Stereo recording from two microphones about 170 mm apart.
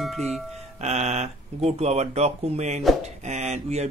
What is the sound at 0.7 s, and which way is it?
Speech, 40° right (ahead or behind).